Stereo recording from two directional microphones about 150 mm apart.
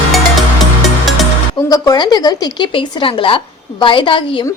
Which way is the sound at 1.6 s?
25° left (ahead or behind).